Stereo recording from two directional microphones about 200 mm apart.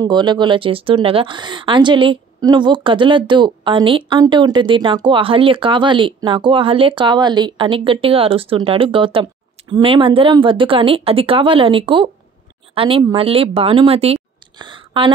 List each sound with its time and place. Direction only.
0.0 s speech: 20° right (ahead or behind)